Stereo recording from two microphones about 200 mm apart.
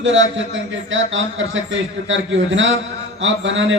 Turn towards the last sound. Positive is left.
turn(degrees=-70)  # may be behind; listen again after turning